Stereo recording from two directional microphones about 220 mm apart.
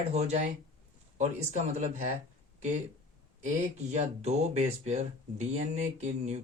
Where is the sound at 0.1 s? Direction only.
30° right (ahead or behind).